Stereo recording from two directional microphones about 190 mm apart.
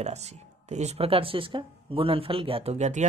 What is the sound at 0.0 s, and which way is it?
Speech, 35° right (ahead or behind).